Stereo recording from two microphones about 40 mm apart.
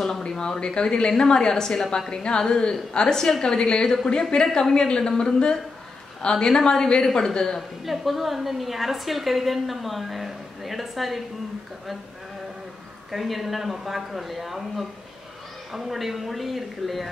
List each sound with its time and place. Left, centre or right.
0.3 s a woman's voice: centre
7.8 s a woman's voice: centre
13.1 s a woman's voice: centre